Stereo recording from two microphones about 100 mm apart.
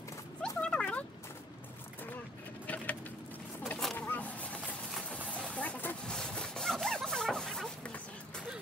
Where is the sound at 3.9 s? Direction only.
15° left (ahead or behind).